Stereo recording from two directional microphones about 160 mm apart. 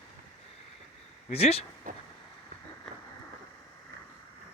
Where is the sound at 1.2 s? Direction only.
40° left (ahead or behind).